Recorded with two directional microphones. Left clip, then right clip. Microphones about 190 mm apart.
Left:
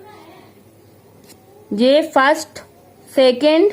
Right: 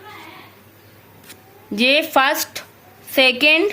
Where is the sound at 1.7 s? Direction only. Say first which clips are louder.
Left 2 dB; 15° left (ahead or behind).